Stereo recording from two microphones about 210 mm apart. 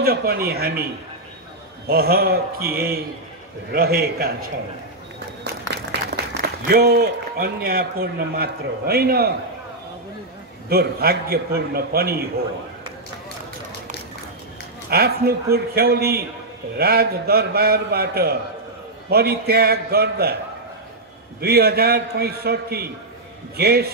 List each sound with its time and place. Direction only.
0.0 s a man's voice: 50° right (ahead or behind)
1.9 s a man's voice: 45° right (ahead or behind)
5.5 s applause: 50° right (ahead or behind)
6.6 s a man's voice: 45° right (ahead or behind)
10.7 s a man's voice: 50° right (ahead or behind)
14.9 s a man's voice: 50° right (ahead or behind)
21.4 s a man's voice: 50° right (ahead or behind)